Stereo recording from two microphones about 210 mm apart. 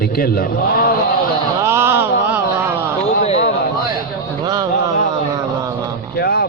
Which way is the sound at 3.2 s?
30° left (ahead or behind).